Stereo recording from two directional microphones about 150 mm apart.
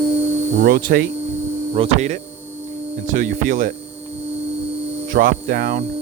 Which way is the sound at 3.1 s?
60° right (ahead or behind).